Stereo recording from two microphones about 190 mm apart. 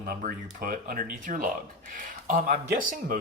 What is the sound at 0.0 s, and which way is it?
Speech, 55° right (ahead or behind).